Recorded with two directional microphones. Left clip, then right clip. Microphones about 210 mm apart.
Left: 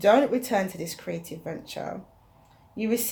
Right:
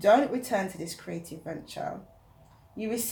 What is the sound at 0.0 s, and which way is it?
Speech, 45° left (ahead or behind).